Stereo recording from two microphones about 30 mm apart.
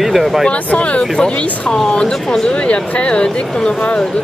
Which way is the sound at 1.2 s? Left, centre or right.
Left.